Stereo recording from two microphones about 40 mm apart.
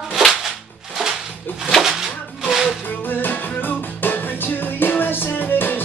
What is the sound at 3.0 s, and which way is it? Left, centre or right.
Music, left.